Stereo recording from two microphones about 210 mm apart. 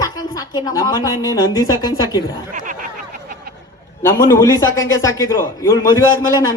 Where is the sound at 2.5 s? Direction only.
40° right (ahead or behind).